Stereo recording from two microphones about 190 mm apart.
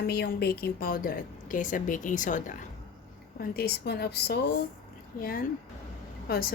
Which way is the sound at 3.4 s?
55° left (ahead or behind).